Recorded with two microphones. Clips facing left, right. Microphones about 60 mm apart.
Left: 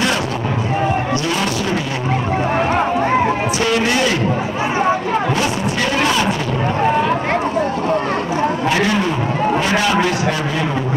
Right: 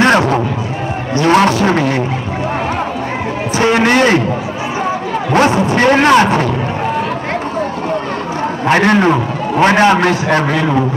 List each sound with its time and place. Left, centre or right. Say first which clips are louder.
0.0 s a sound: right 8 dB; right
1.2 s a man's voice: right 9 dB; right
3.7 s a man's voice: right 8 dB; right
5.3 s speech: right 7 dB; right
8.6 s a man's voice: right 11 dB; right